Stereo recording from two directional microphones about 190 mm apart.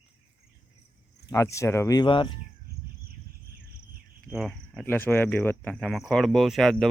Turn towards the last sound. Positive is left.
turn(degrees=0)  # may be behind; listen again after turning